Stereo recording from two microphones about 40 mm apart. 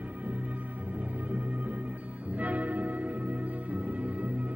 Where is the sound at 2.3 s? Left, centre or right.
Right.